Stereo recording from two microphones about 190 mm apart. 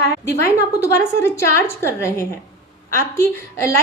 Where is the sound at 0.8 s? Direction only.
15° left (ahead or behind).